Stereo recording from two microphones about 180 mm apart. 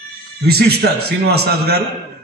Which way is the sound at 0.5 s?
60° right (ahead or behind).